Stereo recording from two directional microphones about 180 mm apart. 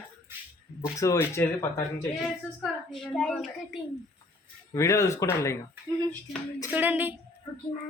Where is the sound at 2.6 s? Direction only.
Centre (ahead or behind).